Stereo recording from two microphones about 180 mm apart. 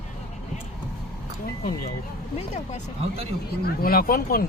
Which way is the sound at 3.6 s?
55° left (ahead or behind).